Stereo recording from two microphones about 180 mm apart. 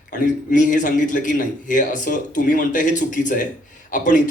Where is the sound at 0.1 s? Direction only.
50° left (ahead or behind).